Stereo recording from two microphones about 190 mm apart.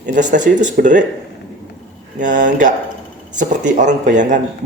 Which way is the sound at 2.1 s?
40° right (ahead or behind).